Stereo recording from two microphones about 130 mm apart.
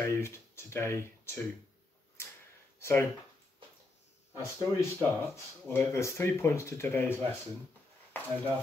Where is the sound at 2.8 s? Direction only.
20° left (ahead or behind).